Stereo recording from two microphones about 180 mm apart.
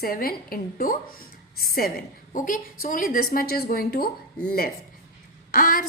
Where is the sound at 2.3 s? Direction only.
45° left (ahead or behind).